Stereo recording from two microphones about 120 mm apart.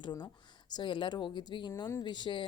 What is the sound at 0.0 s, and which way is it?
A woman's voice, 40° left (ahead or behind).